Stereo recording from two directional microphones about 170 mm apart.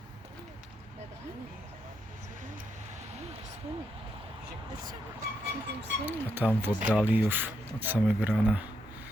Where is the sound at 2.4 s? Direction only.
45° right (ahead or behind).